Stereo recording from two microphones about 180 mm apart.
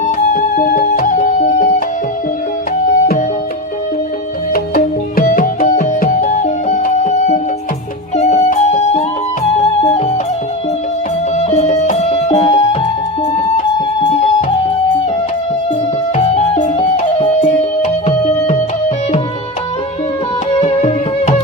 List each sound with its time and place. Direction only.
0.3 s music: 50° left (ahead or behind)
4.5 s music: 55° left (ahead or behind); by 10.0 s 35° left (ahead or behind)
11.3 s music: 40° left (ahead or behind)
16.1 s music: 35° left (ahead or behind)
20.6 s music: 35° left (ahead or behind)